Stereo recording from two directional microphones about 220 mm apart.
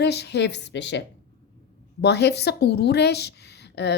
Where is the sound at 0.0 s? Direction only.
50° left (ahead or behind).